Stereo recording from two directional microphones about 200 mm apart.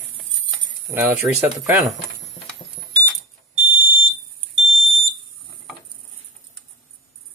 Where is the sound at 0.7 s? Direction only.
10° right (ahead or behind).